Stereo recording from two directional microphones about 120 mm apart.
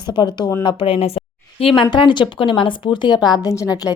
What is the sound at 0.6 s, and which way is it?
A woman's voice, 50° left (ahead or behind).